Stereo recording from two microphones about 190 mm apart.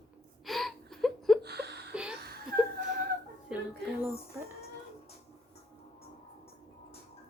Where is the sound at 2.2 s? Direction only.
55° right (ahead or behind).